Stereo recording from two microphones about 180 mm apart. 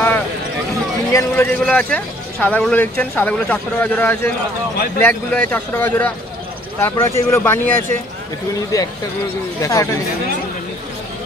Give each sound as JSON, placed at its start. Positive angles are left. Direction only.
{"t": 1.1, "sound": "a man's voice", "side_deg": 10}